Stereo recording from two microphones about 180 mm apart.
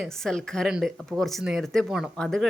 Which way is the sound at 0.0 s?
5° left (ahead or behind).